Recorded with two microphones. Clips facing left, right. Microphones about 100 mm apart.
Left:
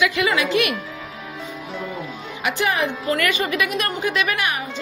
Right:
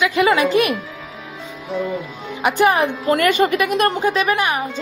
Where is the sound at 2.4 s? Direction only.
45° right (ahead or behind).